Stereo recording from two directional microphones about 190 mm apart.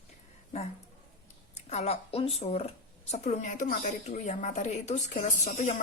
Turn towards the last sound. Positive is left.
turn(degrees=40)  # may be behind; listen again after turning